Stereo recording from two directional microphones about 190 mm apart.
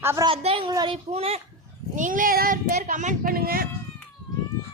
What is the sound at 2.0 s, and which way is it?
Speech, 45° right (ahead or behind).